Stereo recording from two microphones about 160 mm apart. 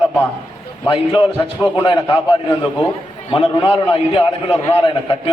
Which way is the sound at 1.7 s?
30° left (ahead or behind).